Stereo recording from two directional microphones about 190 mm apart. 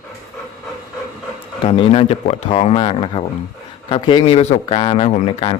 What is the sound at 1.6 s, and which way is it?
A man's voice, 30° left (ahead or behind).